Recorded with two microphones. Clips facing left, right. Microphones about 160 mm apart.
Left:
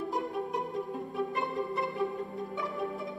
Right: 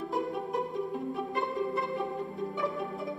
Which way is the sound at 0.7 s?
Centre (ahead or behind).